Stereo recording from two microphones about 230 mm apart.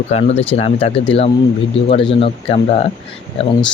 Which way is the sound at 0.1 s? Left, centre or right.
Left.